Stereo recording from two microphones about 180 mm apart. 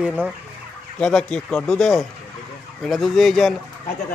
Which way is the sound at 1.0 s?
5° left (ahead or behind).